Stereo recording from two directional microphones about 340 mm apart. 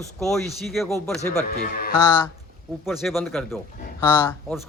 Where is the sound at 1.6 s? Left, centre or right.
Left.